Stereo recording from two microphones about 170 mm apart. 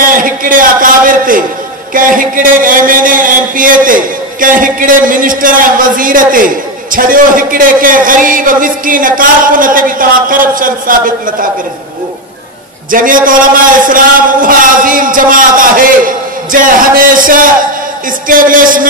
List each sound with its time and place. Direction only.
0.0 s a sound: 55° right (ahead or behind)
2.0 s a man's voice: 55° right (ahead or behind)
12.9 s a man's voice: 55° right (ahead or behind)